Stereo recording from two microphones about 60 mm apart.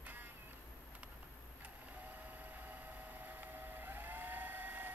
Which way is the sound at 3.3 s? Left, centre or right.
Right.